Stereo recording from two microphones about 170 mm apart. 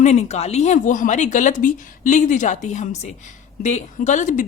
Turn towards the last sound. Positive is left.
turn(degrees=45)  # may be behind; listen again after turning